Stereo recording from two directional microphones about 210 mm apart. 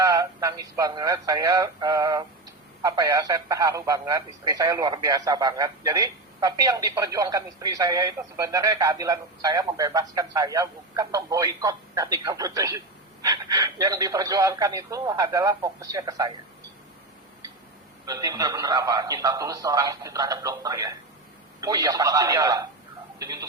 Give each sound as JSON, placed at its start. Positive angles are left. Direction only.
{"t": 0.0, "sound": "a man's voice", "side_deg": -15}
{"t": 18.0, "sound": "a man's voice", "side_deg": -15}